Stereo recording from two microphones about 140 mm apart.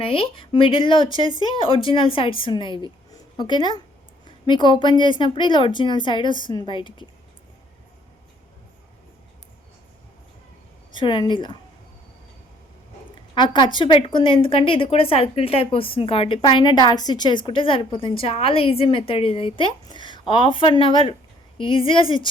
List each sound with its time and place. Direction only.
0.0 s a woman's voice: 40° left (ahead or behind)
10.9 s a woman's voice: 35° left (ahead or behind)
13.3 s a woman's voice: 35° left (ahead or behind)